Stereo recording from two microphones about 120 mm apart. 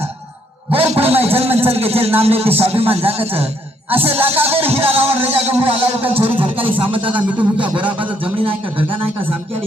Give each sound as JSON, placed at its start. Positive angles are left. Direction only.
{"t": 0.7, "sound": "a man's voice", "side_deg": -55}
{"t": 6.4, "sound": "speech", "side_deg": -45}
{"t": 7.1, "sound": "a man's voice", "side_deg": -10}
{"t": 8.2, "sound": "speech", "side_deg": -50}